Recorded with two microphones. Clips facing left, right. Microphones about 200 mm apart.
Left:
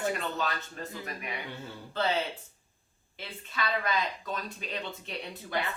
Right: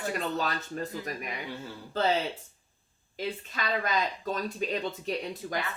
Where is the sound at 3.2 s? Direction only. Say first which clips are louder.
Right 3 dB; 40° right (ahead or behind).